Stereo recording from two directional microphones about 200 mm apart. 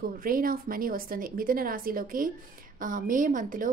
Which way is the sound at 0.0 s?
45° right (ahead or behind).